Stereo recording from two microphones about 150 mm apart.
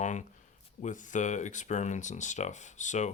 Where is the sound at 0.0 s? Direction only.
55° left (ahead or behind).